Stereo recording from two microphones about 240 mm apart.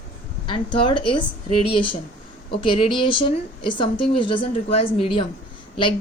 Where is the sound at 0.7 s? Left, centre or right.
Left.